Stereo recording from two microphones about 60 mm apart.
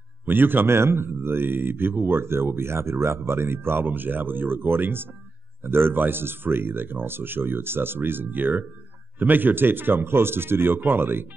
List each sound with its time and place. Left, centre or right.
0.2 s speech: right